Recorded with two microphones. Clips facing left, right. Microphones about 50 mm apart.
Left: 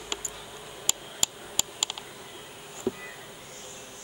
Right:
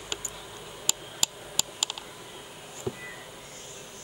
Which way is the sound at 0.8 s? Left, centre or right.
Left.